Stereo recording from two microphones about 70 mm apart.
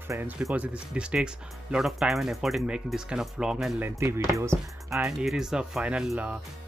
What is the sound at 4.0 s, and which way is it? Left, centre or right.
Speech, right.